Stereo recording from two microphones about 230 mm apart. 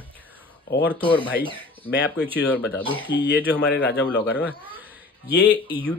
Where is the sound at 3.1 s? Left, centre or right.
Left.